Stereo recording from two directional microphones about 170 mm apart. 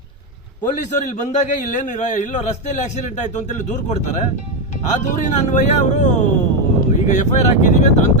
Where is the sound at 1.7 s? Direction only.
45° left (ahead or behind).